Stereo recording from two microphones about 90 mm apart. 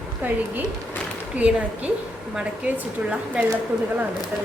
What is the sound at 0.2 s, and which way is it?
A woman's voice, 20° right (ahead or behind).